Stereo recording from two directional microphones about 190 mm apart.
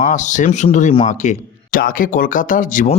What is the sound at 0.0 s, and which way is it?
Speech, 40° left (ahead or behind).